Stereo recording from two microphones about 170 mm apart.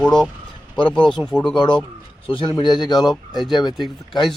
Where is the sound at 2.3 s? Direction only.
30° left (ahead or behind).